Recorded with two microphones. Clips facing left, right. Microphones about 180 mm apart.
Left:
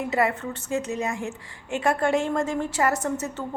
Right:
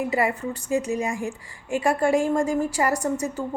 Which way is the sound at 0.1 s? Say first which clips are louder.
Even; 10° right (ahead or behind).